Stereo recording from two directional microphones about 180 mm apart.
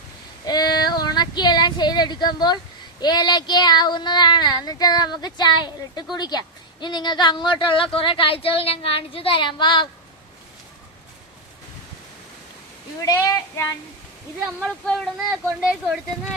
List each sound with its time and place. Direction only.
0.4 s female singing: 20° left (ahead or behind)
3.0 s speech: 25° left (ahead or behind)
13.0 s speech: 20° left (ahead or behind)
14.6 s speech: 5° left (ahead or behind)